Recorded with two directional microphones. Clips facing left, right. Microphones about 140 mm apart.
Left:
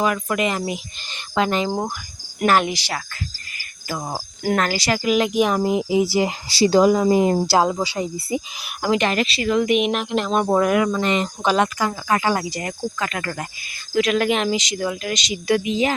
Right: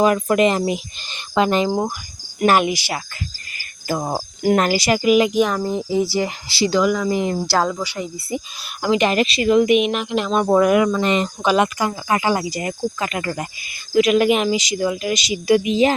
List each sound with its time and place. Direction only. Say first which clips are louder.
0.0 s speech: right 6 dB; 30° right (ahead or behind)
2.5 s speech: right 2 dB; 10° right (ahead or behind)
3.8 s cricket: right 6 dB; 35° right (ahead or behind)
4.1 s speech: right 4 dB; 20° right (ahead or behind); by 6.3 s 20° left (ahead or behind)
6.5 s speech: left 3 dB; 35° left (ahead or behind)
8.3 s speech: left 1 dB; 15° left (ahead or behind)
8.8 s speech: right 2 dB; centre (ahead or behind)
9.0 s speech: right 4 dB; 20° right (ahead or behind); by 10.6 s 5° left (ahead or behind)
10.6 s speech: right 5 dB; 10° right (ahead or behind)
11.0 s speech: right 2 dB; 25° right (ahead or behind)
11.4 s speech: right 1 dB; 10° right (ahead or behind)